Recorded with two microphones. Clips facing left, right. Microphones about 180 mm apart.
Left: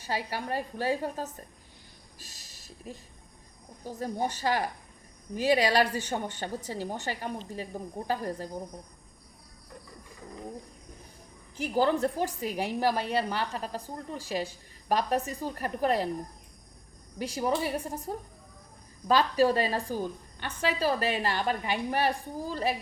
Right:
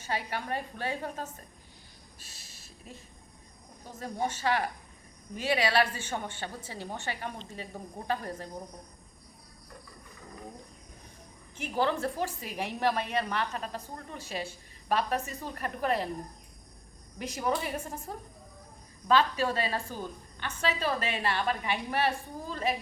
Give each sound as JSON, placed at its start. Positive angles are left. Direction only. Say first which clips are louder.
{"t": 0.0, "sound": "a woman's voice", "louder": "left 1 dB", "side_deg": 35}
{"t": 2.1, "sound": "a sound", "louder": "left 2 dB", "side_deg": 40}
{"t": 3.8, "sound": "a woman's voice", "louder": "left 2 dB", "side_deg": 40}
{"t": 11.5, "sound": "a woman's voice", "louder": "left 4 dB", "side_deg": 35}
{"t": 17.2, "sound": "a woman's voice", "louder": "left 2 dB", "side_deg": 35}